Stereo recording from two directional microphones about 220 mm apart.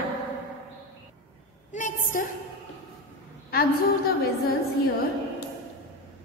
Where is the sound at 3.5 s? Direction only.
45° left (ahead or behind).